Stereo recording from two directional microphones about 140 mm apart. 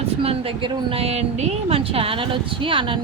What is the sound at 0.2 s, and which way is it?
A woman's voice, 45° right (ahead or behind).